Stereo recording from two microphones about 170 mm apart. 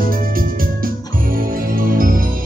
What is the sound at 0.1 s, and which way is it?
Music, 55° right (ahead or behind).